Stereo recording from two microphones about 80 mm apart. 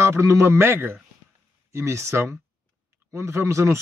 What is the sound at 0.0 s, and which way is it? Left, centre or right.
A man's voice, right.